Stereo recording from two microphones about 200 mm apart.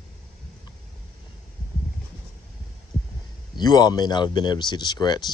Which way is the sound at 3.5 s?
20° left (ahead or behind).